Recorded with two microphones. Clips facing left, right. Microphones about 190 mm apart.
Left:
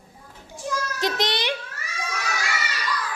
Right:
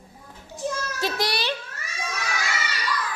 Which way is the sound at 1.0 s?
20° left (ahead or behind).